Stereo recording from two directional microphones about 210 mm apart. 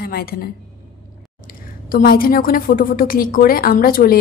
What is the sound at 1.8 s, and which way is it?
A woman's voice, 40° left (ahead or behind).